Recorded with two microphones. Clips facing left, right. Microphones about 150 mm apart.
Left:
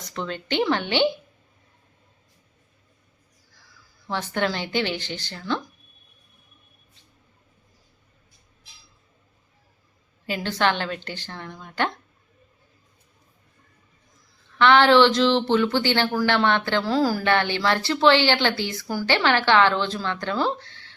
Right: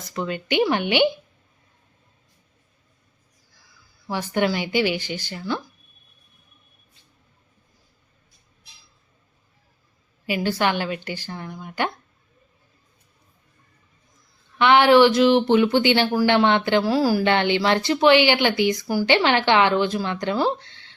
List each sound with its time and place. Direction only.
0.1 s speech: 10° right (ahead or behind)
4.0 s speech: 10° right (ahead or behind)
10.2 s speech: 10° right (ahead or behind)
14.6 s speech: 15° right (ahead or behind)